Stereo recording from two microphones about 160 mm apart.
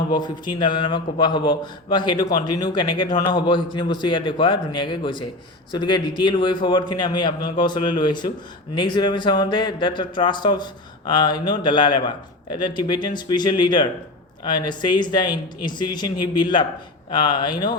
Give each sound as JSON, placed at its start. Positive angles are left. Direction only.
{"t": 0.1, "sound": "a man's voice", "side_deg": 25}